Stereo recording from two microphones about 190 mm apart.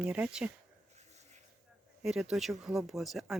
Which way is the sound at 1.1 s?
35° right (ahead or behind).